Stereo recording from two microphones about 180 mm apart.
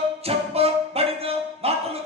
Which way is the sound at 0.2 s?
35° right (ahead or behind).